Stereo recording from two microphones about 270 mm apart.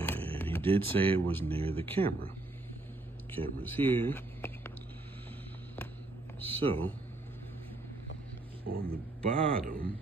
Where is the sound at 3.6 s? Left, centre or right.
Centre.